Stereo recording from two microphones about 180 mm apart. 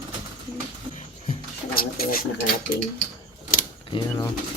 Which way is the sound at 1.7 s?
55° left (ahead or behind).